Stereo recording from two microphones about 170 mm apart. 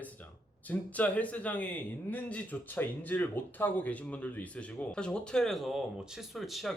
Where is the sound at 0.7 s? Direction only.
10° left (ahead or behind).